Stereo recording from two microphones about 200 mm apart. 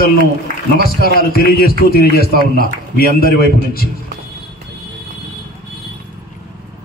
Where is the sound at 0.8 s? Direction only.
50° left (ahead or behind).